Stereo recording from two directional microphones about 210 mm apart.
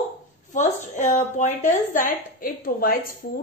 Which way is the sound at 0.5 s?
35° left (ahead or behind).